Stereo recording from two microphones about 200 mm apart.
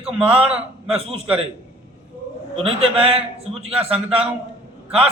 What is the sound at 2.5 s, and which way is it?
A man's voice, 30° right (ahead or behind).